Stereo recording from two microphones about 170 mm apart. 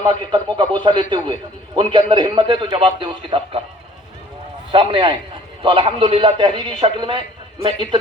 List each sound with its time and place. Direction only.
0.0 s a man's voice: 25° right (ahead or behind)
4.7 s a man's voice: 30° right (ahead or behind)